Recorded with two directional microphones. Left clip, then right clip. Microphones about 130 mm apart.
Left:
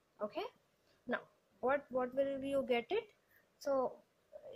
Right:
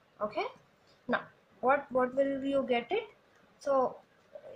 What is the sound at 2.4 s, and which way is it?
Speech, 65° left (ahead or behind).